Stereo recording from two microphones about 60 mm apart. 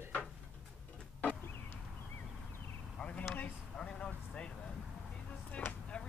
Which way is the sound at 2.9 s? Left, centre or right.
Centre.